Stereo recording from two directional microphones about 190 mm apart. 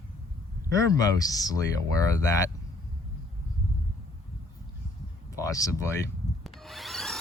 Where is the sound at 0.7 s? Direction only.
15° left (ahead or behind).